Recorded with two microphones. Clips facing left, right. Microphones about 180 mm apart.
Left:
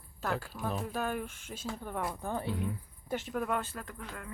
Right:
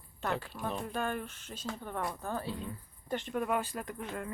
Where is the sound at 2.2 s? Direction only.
15° left (ahead or behind).